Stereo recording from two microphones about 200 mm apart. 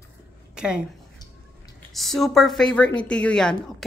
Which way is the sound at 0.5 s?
5° right (ahead or behind).